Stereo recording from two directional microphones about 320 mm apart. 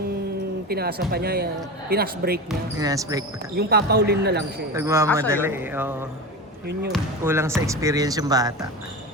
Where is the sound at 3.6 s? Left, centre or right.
Right.